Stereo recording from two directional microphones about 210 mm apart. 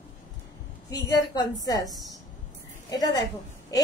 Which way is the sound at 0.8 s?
15° left (ahead or behind).